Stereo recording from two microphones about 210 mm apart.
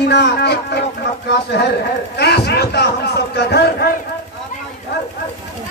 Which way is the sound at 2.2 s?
50° left (ahead or behind).